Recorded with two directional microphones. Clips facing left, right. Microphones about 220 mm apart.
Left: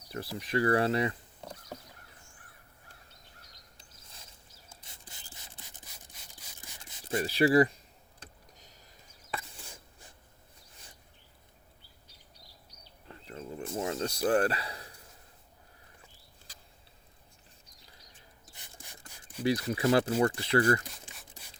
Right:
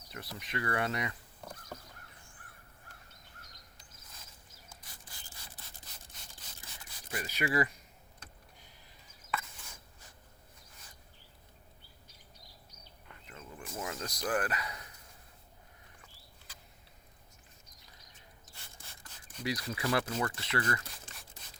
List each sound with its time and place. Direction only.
0.1 s a sound: 30° left (ahead or behind)
4.7 s rub: 25° left (ahead or behind)
6.8 s speech: 25° left (ahead or behind)
8.2 s vehicle: 40° left (ahead or behind)
9.3 s a sound: 30° left (ahead or behind)
13.1 s a sound: 35° left (ahead or behind)
18.5 s rub: 15° left (ahead or behind)
19.4 s speech: 30° left (ahead or behind)
20.9 s rub: centre (ahead or behind)